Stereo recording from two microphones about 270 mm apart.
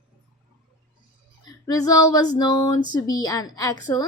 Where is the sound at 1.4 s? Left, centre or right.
Centre.